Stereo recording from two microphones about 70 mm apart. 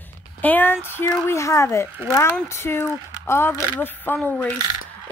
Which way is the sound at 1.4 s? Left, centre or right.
Left.